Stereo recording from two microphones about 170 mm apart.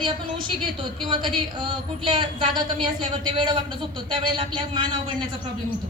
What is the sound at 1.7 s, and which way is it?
A woman's voice, 30° right (ahead or behind).